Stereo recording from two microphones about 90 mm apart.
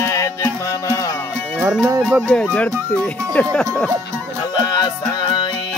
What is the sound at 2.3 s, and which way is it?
Music, 10° left (ahead or behind).